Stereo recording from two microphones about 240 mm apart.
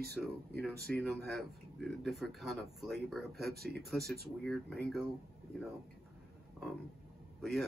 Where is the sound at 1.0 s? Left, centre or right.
Centre.